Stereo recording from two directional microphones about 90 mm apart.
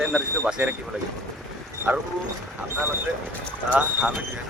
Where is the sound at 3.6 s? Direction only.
15° right (ahead or behind).